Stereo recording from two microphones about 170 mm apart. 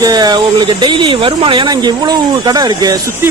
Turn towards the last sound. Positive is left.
turn(degrees=-20)  # may be behind; listen again after turning